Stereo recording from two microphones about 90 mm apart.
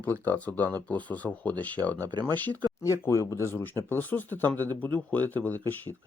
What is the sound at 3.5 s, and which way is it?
Speech, 20° left (ahead or behind).